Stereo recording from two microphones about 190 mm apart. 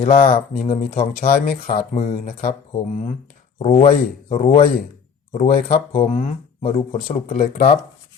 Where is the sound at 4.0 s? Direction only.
40° left (ahead or behind).